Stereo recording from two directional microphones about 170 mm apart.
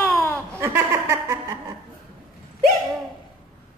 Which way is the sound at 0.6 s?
15° right (ahead or behind).